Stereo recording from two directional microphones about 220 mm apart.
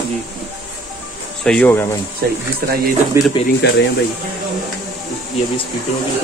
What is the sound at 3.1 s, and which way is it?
Speech, 10° right (ahead or behind).